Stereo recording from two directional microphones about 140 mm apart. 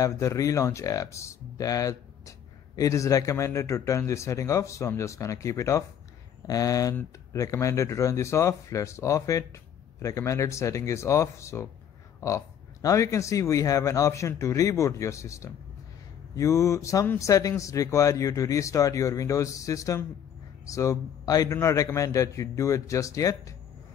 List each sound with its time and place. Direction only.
0.0 s speech: 20° left (ahead or behind)